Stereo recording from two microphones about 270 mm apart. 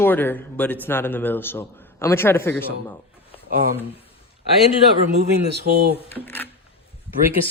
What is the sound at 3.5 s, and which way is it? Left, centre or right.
Speech, right.